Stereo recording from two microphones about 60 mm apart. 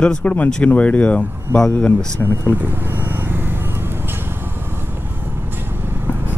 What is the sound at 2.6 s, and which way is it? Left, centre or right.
Vehicle, right.